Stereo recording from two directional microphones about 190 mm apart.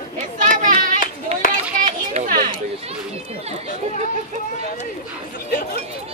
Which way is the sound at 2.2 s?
45° right (ahead or behind).